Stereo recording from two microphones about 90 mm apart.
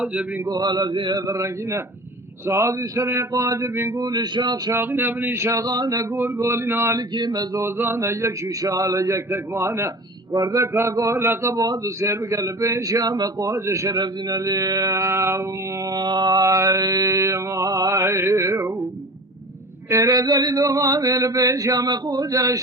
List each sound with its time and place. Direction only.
0.0 s mantra: 10° right (ahead or behind)
0.4 s a sound: 50° right (ahead or behind)
1.3 s mantra: 35° right (ahead or behind)
3.9 s a sound: 50° right (ahead or behind)
4.7 s mantra: 25° right (ahead or behind); by 6.1 s 45° right (ahead or behind)
6.1 s speech: 20° right (ahead or behind)
7.1 s speech: 55° right (ahead or behind)
7.8 s mantra: 25° right (ahead or behind)
11.6 s mantra: 45° right (ahead or behind)
14.0 s mantra: 50° right (ahead or behind); by 18.7 s 30° right (ahead or behind)
19.9 s mantra: 40° right (ahead or behind)